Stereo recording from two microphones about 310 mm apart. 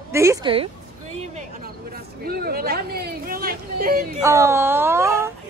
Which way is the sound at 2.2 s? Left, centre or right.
Right.